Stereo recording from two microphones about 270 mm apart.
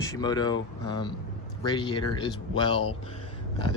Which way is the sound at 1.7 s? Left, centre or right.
Centre.